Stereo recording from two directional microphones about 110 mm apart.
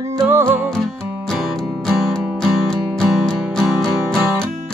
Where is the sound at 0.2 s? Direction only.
20° right (ahead or behind).